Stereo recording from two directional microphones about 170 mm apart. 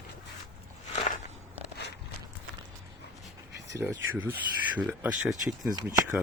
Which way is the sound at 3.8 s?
10° right (ahead or behind).